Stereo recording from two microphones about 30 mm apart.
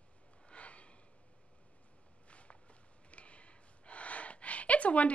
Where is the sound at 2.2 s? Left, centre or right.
Left.